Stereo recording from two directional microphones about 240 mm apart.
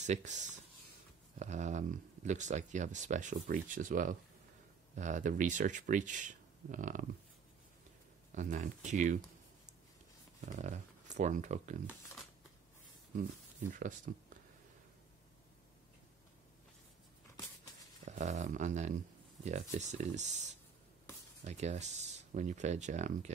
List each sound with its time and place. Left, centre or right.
0.0 s speech: right
8.3 s speech: right
10.4 s speech: right
13.7 s speech: right
18.0 s speech: right
21.5 s speech: right